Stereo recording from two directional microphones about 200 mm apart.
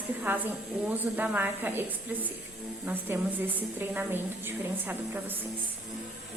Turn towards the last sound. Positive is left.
turn(degrees=-10)  # may be behind; listen again after turning